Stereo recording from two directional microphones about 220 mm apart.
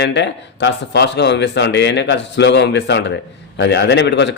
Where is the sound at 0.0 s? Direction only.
50° left (ahead or behind).